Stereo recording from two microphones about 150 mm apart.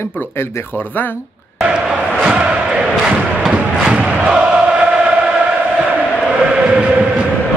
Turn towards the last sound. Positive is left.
turn(degrees=-10)  # may be behind; listen again after turning